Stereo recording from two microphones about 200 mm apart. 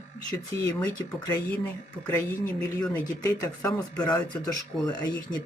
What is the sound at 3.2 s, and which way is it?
Speech, 15° left (ahead or behind).